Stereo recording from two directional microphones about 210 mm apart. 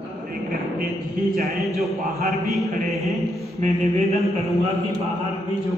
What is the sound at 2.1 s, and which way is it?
Speech, 45° right (ahead or behind).